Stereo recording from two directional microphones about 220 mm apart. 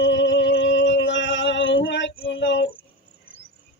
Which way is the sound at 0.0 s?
55° left (ahead or behind).